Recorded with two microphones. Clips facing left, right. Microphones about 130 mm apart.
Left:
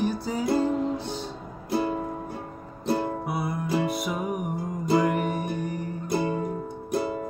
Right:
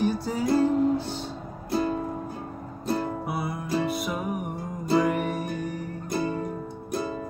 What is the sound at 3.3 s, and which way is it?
Music, centre (ahead or behind).